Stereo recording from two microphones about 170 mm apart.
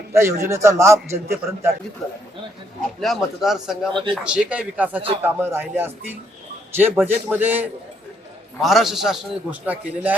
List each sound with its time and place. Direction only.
0.1 s a man's voice: 15° right (ahead or behind)
3.0 s a man's voice: centre (ahead or behind)